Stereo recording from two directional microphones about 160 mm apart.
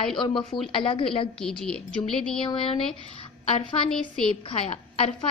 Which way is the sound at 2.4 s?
35° left (ahead or behind).